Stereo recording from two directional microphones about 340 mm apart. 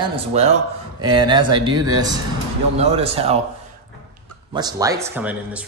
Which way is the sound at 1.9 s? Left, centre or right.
Centre.